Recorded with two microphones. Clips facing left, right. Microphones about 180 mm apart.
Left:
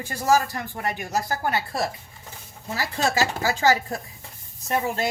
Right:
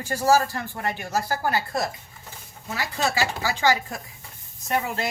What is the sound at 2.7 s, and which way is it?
Speech, 40° left (ahead or behind).